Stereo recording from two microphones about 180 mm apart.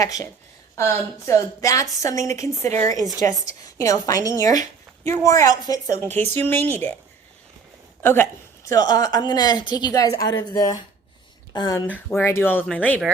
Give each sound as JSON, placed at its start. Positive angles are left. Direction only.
{"t": 0.0, "sound": "a woman's voice", "side_deg": 20}
{"t": 8.0, "sound": "a woman's voice", "side_deg": 10}
{"t": 11.9, "sound": "a woman's voice", "side_deg": 10}